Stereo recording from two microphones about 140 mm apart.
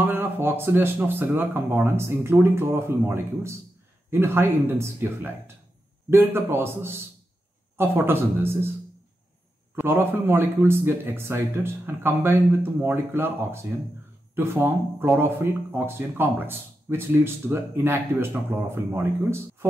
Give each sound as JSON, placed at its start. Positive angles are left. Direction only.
{"t": 0.0, "sound": "speech", "side_deg": -15}
{"t": 9.8, "sound": "speech", "side_deg": -15}